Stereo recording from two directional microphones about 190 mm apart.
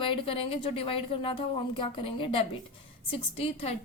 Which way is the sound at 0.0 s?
25° left (ahead or behind).